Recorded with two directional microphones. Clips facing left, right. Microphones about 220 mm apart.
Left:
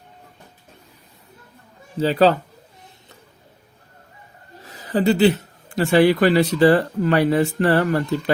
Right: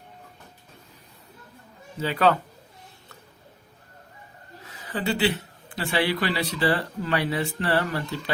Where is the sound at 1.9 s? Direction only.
35° left (ahead or behind).